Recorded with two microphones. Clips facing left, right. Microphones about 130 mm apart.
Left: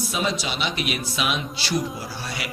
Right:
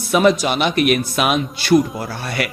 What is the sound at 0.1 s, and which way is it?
A man's voice, 60° right (ahead or behind).